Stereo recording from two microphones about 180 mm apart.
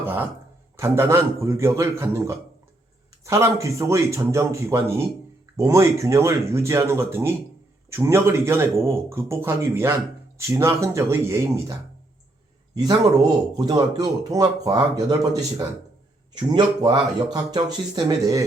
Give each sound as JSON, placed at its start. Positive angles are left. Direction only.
{"t": 0.0, "sound": "a sound", "side_deg": -10}
{"t": 0.8, "sound": "a man's voice", "side_deg": -15}
{"t": 12.8, "sound": "speech", "side_deg": -20}